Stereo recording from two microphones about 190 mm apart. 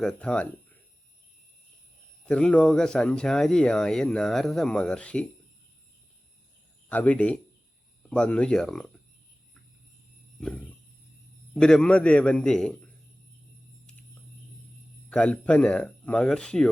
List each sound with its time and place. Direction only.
0.0 s speech: 5° left (ahead or behind)
2.2 s a man's voice: 5° left (ahead or behind)
6.8 s a man's voice: 5° left (ahead or behind)
10.4 s a man's voice: 5° left (ahead or behind)
15.1 s a man's voice: 5° left (ahead or behind)